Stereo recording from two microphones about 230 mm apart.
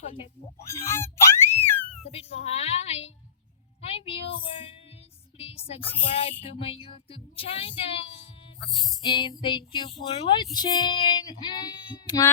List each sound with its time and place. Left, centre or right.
0.7 s screaming: centre
2.0 s speech: left
5.4 s speech: left
8.6 s music: centre
9.0 s speech: left